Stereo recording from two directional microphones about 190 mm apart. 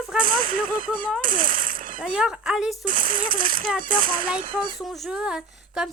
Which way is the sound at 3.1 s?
25° right (ahead or behind).